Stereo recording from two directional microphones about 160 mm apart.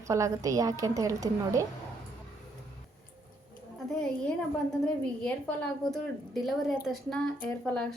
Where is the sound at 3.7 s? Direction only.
5° left (ahead or behind).